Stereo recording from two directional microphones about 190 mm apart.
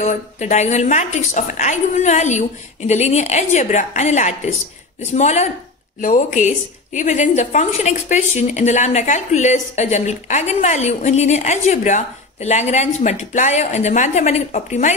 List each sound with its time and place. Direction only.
0.0 s a woman's voice: 40° left (ahead or behind)